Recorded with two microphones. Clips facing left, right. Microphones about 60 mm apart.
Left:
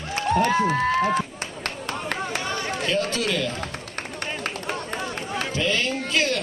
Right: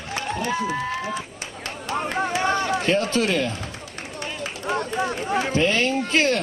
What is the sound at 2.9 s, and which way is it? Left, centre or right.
Speech, right.